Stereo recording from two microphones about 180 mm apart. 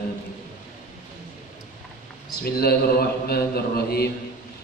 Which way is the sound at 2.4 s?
60° left (ahead or behind).